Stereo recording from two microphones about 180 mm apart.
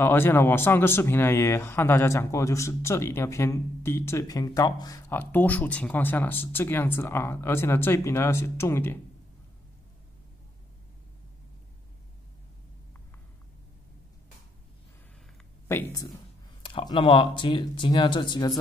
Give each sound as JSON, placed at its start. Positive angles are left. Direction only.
{"t": 0.0, "sound": "speech", "side_deg": 10}
{"t": 15.7, "sound": "speech", "side_deg": 15}
{"t": 16.6, "sound": "speech", "side_deg": 25}